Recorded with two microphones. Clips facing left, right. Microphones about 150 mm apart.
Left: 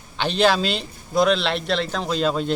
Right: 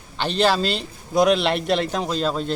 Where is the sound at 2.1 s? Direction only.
Centre (ahead or behind).